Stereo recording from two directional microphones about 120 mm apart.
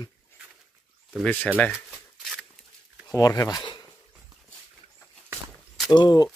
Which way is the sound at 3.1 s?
30° left (ahead or behind).